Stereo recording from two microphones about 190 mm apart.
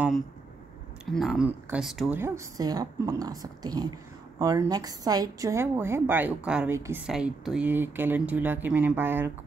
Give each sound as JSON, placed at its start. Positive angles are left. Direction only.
{"t": 1.1, "sound": "speech", "side_deg": 0}